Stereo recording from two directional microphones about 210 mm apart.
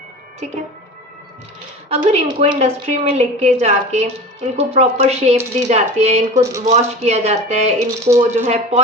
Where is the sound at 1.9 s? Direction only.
30° right (ahead or behind).